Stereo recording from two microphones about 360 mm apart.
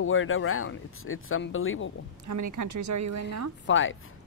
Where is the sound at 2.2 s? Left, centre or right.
Right.